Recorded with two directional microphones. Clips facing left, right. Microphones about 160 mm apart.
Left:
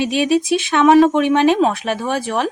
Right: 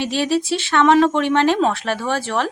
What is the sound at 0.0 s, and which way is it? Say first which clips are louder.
Speech: left 3 dB; 15° left (ahead or behind).